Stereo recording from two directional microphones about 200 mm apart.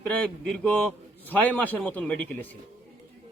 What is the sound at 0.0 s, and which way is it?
A man's voice, 5° left (ahead or behind).